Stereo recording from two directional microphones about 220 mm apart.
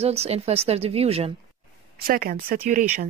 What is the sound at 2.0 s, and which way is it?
Speech, 40° right (ahead or behind).